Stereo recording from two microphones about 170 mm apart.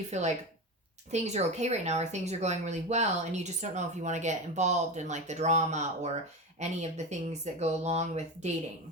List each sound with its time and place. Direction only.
0.1 s speech: 40° right (ahead or behind)